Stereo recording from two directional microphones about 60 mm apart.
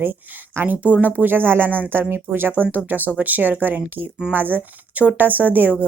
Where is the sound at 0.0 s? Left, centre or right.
Right.